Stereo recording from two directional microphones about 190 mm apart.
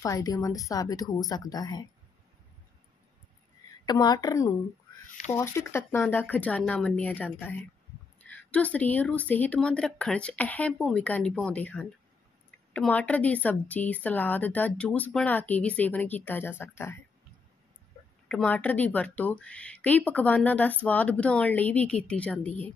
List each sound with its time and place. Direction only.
0.0 s speech: 20° left (ahead or behind)
3.8 s speech: 20° left (ahead or behind)
18.3 s speech: 5° left (ahead or behind)